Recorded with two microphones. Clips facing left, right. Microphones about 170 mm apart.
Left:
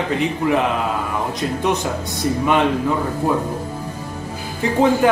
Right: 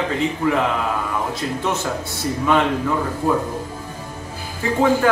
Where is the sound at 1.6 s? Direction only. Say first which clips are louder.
Left 4 dB; 15° left (ahead or behind).